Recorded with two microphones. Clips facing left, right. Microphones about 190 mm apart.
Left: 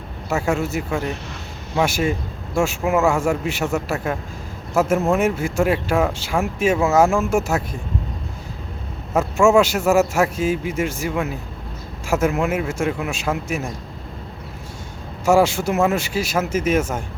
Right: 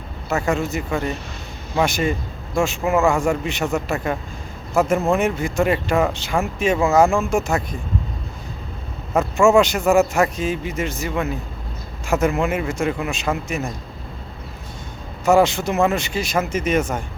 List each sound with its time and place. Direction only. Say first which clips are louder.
0.3 s speech: even; 10° left (ahead or behind)
9.1 s speech: even; 5° left (ahead or behind)
15.2 s speech: even; 10° left (ahead or behind)